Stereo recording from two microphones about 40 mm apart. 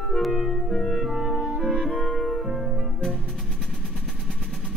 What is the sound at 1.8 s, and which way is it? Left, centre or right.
Music, centre.